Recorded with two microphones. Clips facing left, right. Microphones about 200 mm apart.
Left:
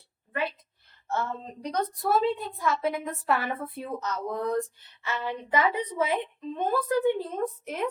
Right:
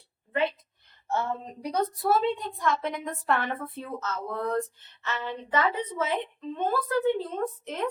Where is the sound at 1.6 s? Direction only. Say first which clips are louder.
Right 2 dB; 5° right (ahead or behind).